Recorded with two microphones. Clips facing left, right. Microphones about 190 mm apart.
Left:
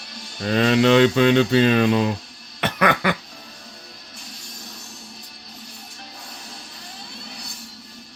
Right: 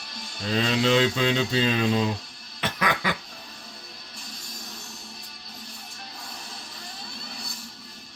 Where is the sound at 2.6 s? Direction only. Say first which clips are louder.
Left 7 dB; 65° left (ahead or behind).